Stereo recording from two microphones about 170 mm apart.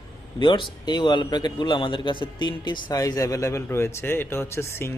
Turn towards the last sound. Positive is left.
turn(degrees=15)  # may be behind; listen again after turning